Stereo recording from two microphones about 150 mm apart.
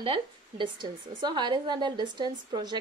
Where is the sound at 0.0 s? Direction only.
35° right (ahead or behind).